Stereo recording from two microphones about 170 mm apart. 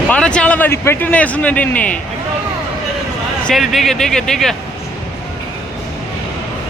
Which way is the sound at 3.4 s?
Centre (ahead or behind).